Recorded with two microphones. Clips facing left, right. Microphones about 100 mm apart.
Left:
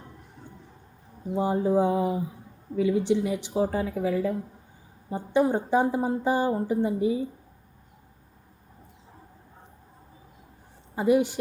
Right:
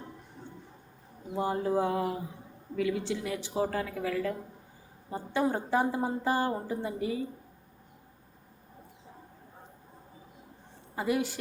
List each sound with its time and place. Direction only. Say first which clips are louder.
1.4 s speech: left 5 dB; 20° left (ahead or behind)
10.9 s a woman's voice: left 8 dB; 20° left (ahead or behind)